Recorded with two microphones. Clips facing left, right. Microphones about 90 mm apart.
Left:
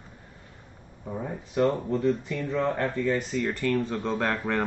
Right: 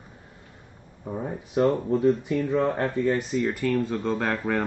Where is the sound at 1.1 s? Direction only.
20° right (ahead or behind); by 4.6 s centre (ahead or behind).